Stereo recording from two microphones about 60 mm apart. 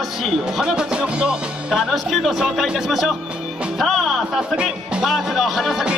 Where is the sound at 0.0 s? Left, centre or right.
Centre.